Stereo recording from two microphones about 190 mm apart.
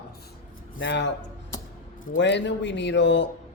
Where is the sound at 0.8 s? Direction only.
70° left (ahead or behind).